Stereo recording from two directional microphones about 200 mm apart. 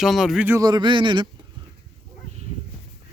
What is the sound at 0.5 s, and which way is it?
Speech, 20° right (ahead or behind).